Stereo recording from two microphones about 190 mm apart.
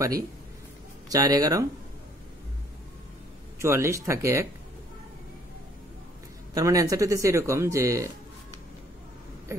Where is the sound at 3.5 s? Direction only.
15° right (ahead or behind).